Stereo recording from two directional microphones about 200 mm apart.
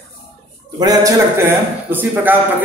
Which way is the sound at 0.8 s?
15° right (ahead or behind).